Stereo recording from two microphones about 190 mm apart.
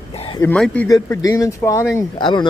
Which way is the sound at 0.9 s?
15° left (ahead or behind).